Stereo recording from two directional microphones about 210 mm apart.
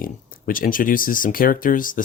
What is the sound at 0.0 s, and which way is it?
Speech, 40° left (ahead or behind).